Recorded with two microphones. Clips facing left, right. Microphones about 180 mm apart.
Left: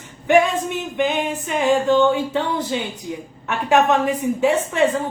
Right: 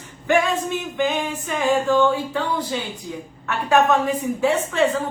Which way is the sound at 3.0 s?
20° left (ahead or behind).